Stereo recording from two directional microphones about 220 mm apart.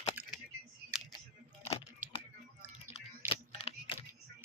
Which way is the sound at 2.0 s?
5° right (ahead or behind).